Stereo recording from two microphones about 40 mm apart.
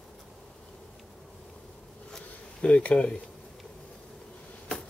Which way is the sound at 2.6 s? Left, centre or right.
Left.